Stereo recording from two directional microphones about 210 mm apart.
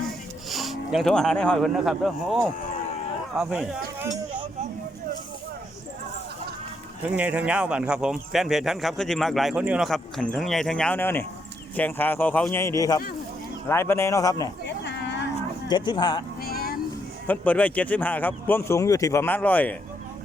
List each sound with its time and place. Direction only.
0.5 s speech: centre (ahead or behind)
7.0 s speech: 5° right (ahead or behind); by 14.5 s 15° left (ahead or behind)
15.7 s speech: 20° left (ahead or behind)
16.4 s vehicle: 45° left (ahead or behind)
17.2 s speech: 5° left (ahead or behind)